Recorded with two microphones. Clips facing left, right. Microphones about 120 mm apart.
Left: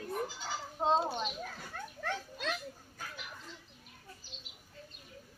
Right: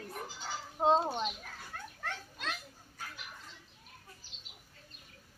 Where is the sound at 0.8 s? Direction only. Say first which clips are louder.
Right 3 dB; 5° right (ahead or behind).